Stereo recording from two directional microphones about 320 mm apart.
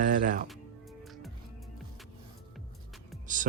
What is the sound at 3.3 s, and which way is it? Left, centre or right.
Music, right.